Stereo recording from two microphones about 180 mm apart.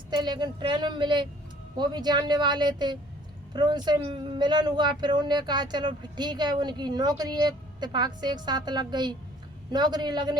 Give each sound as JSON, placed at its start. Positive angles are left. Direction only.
{"t": 0.1, "sound": "speech", "side_deg": -25}